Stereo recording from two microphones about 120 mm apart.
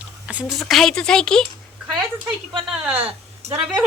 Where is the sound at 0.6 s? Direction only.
Centre (ahead or behind).